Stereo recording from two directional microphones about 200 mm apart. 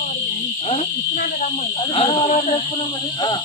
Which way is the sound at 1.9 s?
25° left (ahead or behind).